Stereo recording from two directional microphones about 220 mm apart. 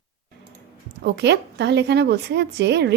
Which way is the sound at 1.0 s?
50° right (ahead or behind).